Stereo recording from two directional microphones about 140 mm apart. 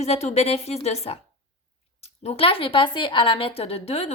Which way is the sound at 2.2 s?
40° left (ahead or behind).